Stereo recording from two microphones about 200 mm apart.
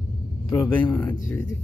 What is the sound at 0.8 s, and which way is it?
Speech, 10° left (ahead or behind).